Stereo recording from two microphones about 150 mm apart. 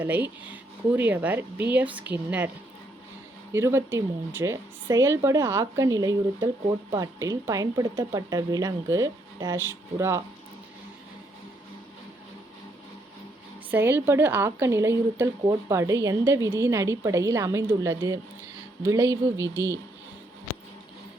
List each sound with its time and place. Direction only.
0.0 s a woman's voice: 10° right (ahead or behind)
3.5 s a woman's voice: 15° right (ahead or behind)
13.7 s a woman's voice: 15° right (ahead or behind)